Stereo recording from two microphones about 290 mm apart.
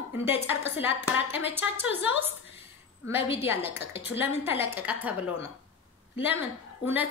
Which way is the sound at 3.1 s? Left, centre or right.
Centre.